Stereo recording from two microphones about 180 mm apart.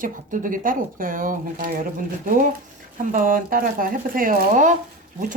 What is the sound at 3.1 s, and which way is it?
Speech, 50° right (ahead or behind).